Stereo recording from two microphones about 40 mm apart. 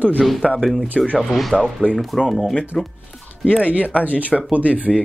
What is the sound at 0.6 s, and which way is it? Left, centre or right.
Speech, centre.